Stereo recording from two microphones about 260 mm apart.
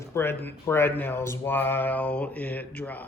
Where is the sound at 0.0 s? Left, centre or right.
Centre.